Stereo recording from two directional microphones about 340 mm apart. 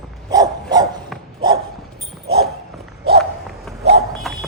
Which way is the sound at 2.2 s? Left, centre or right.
Right.